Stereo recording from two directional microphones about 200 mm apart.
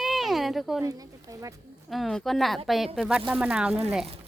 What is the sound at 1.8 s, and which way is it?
Speech, centre (ahead or behind).